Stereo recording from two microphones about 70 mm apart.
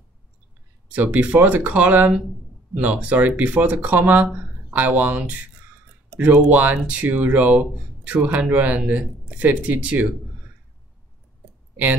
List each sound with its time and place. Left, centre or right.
0.9 s speech: right
11.7 s speech: right